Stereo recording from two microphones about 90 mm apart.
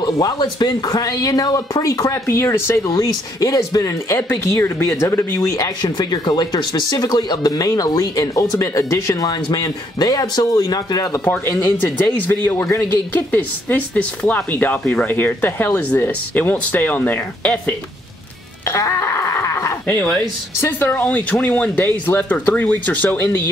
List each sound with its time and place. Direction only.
0.0 s speech: 55° left (ahead or behind); by 2.9 s 30° left (ahead or behind)
2.9 s speech: 40° left (ahead or behind)
4.6 s speech: 25° left (ahead or behind)
5.6 s speech: 50° left (ahead or behind)
11.2 s speech: 20° left (ahead or behind)
18.7 s a sound: 30° left (ahead or behind)
19.9 s speech: 15° left (ahead or behind)